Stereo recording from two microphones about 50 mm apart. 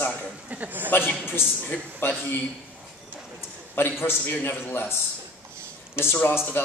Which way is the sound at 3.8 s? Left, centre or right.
Left.